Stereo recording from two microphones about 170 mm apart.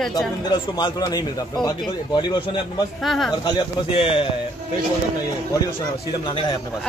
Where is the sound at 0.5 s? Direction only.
25° left (ahead or behind).